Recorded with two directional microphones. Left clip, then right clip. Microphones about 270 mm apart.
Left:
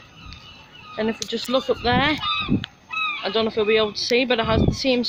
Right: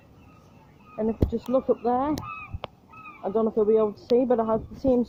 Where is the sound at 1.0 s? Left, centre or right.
Left.